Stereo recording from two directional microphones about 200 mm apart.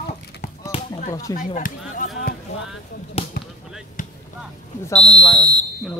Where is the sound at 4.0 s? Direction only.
40° left (ahead or behind).